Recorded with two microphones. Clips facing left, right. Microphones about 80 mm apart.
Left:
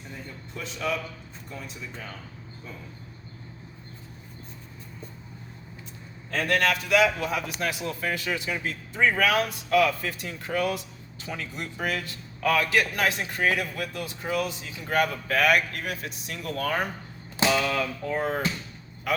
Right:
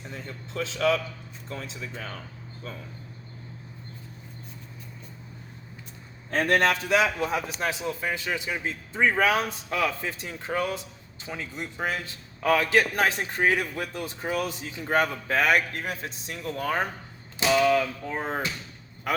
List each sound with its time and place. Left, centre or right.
0.1 s a sound: right
1.5 s speech: right
6.3 s a man's voice: right
18.1 s a man's voice: right
19.1 s quack: right